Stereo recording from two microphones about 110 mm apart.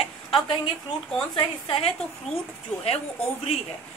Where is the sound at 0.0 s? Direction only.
55° left (ahead or behind).